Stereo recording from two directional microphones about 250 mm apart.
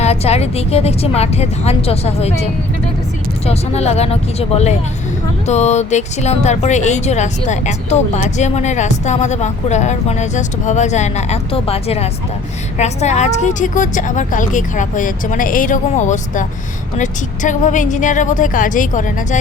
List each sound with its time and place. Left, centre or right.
0.0 s speech: left
3.4 s a woman's voice: left